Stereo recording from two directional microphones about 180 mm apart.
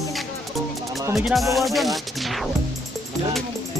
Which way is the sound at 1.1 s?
Centre (ahead or behind).